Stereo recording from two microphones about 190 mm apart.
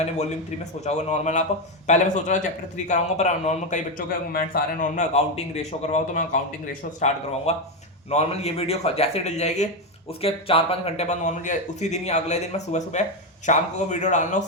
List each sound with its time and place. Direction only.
0.0 s a man's voice: 35° left (ahead or behind)
7.5 s a man's voice: 35° left (ahead or behind)